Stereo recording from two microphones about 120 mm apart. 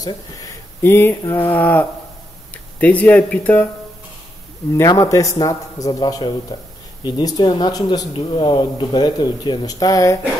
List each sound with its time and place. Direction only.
0.8 s a man's voice: 20° left (ahead or behind)
4.7 s a man's voice: 25° left (ahead or behind)